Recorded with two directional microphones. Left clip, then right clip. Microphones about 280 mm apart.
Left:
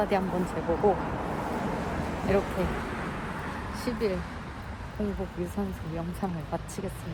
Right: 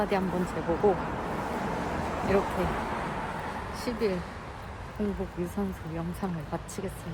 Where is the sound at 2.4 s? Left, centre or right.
Right.